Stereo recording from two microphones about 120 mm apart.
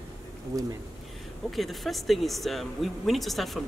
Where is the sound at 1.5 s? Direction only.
Centre (ahead or behind).